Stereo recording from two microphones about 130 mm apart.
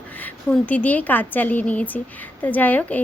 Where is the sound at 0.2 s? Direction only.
10° left (ahead or behind).